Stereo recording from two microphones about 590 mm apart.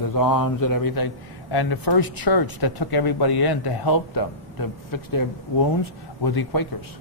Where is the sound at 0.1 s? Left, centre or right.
Left.